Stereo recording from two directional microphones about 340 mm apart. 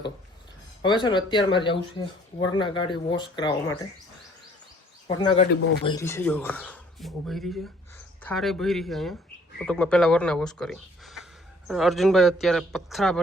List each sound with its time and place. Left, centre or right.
0.8 s speech: centre
5.0 s speech: centre